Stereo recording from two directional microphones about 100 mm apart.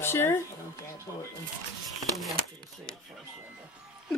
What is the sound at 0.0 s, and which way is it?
Speech, 25° left (ahead or behind).